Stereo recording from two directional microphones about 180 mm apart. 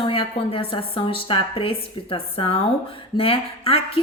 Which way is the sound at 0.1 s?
30° left (ahead or behind).